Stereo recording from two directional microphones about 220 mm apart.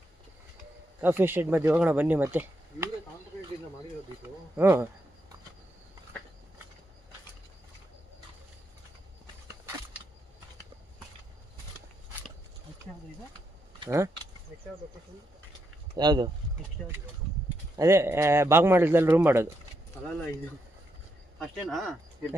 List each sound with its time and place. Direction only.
1.0 s speech: 10° right (ahead or behind)
4.5 s speech: 10° right (ahead or behind)
13.7 s speech: 15° right (ahead or behind)
16.0 s speech: 20° right (ahead or behind)
17.7 s speech: 15° right (ahead or behind)
21.3 s speech: centre (ahead or behind)